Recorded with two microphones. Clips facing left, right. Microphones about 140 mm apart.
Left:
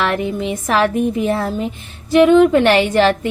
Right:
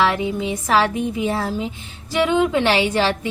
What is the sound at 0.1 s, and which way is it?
A woman's voice, 55° left (ahead or behind).